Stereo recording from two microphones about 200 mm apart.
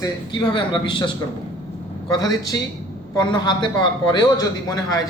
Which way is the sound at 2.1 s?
20° left (ahead or behind).